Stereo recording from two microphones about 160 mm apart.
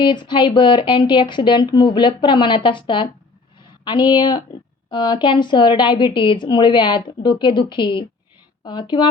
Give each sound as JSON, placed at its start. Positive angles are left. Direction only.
{"t": 0.0, "sound": "a woman's voice", "side_deg": 30}